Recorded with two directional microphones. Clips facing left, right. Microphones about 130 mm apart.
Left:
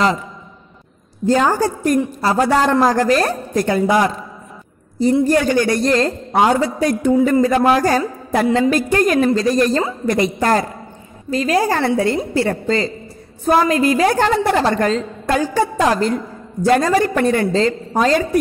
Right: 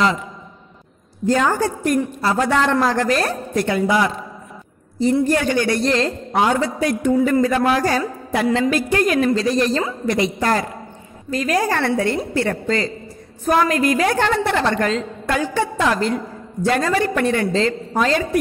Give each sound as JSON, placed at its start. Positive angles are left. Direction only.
{"t": 1.2, "sound": "a woman's voice", "side_deg": 35}
{"t": 5.2, "sound": "a woman's voice", "side_deg": 40}
{"t": 11.2, "sound": "a woman's voice", "side_deg": 30}